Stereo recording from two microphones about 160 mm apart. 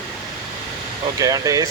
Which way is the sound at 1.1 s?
20° right (ahead or behind).